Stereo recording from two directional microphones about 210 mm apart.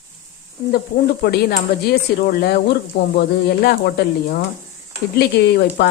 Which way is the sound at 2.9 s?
60° left (ahead or behind).